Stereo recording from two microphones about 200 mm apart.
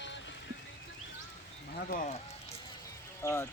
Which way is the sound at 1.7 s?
40° left (ahead or behind).